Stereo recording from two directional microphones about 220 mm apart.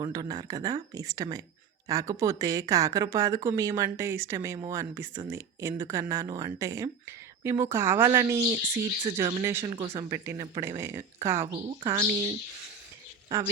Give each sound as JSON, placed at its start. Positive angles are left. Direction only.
{"t": 0.0, "sound": "speech", "side_deg": -15}